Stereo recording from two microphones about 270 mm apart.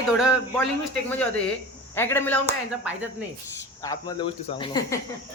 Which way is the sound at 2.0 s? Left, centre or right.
Centre.